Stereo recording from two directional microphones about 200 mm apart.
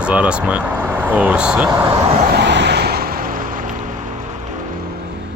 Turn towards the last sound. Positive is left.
turn(degrees=-45)  # may be behind; listen again after turning